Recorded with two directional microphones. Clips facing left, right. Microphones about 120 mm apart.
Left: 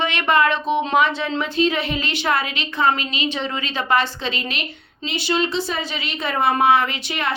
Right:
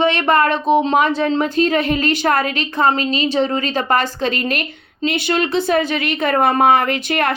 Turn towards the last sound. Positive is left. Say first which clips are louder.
# right 6 dB
turn(degrees=-55)  # may be behind; listen again after turning